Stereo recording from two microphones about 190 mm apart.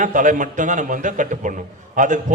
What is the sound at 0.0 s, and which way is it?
A man's voice, 40° right (ahead or behind).